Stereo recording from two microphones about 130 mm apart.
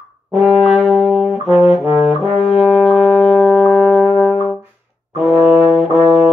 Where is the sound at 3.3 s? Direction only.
Centre (ahead or behind).